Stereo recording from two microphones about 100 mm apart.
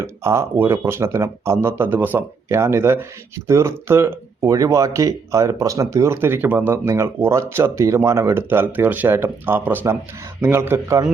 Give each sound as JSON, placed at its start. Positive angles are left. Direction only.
{"t": 0.0, "sound": "speech", "side_deg": -30}